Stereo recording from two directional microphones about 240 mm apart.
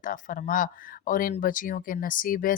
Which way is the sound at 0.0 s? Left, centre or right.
Left.